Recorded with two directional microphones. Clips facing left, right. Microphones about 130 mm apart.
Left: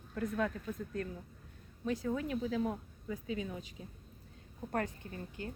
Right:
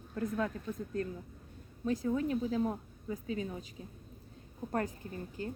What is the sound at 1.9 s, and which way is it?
Speech, 40° right (ahead or behind).